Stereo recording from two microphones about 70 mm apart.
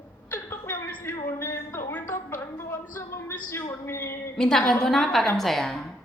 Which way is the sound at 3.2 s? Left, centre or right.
Left.